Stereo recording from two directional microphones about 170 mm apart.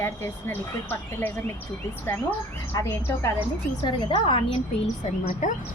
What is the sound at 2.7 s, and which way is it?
Speech, 15° left (ahead or behind).